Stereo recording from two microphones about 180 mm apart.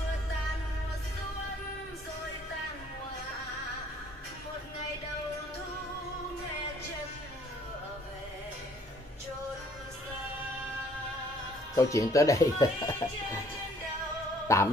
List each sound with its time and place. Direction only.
11.7 s speech: 20° left (ahead or behind)
14.5 s speech: 15° left (ahead or behind)